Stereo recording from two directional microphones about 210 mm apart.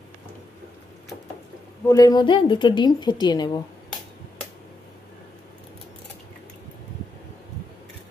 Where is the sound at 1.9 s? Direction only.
15° left (ahead or behind).